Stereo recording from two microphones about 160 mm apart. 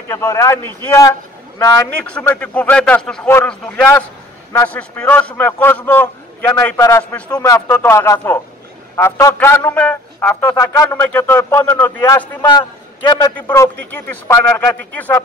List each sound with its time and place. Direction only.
0.1 s a man's voice: 20° left (ahead or behind)
2.0 s a man's voice: 5° left (ahead or behind)
7.3 s a man's voice: 20° left (ahead or behind)
10.5 s a man's voice: 20° left (ahead or behind)
12.4 s a man's voice: 30° left (ahead or behind)
13.8 s a man's voice: 10° left (ahead or behind)